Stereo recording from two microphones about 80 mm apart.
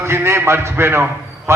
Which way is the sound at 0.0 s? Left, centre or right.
Right.